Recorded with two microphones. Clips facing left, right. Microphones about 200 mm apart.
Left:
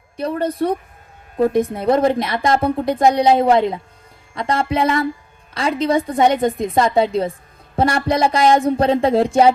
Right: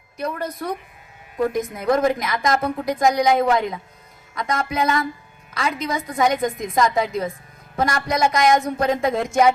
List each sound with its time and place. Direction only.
0.2 s a woman's voice: 30° left (ahead or behind)